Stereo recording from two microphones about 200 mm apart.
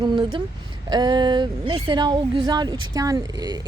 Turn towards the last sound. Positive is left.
turn(degrees=-20)  # may be behind; listen again after turning